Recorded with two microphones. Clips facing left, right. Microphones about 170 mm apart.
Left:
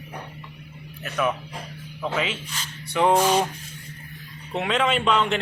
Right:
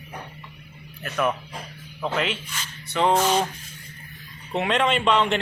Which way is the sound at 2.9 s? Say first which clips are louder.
Left 1 dB; 10° left (ahead or behind).